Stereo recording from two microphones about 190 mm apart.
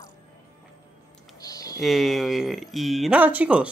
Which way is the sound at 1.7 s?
Centre (ahead or behind).